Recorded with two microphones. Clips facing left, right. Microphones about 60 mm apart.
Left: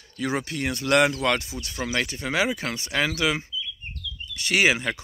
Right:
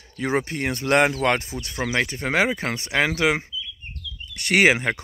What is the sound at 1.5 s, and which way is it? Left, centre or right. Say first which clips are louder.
Speech: right 3 dB; right.